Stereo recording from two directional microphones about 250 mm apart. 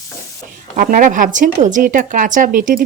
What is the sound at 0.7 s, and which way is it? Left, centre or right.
Speech, right.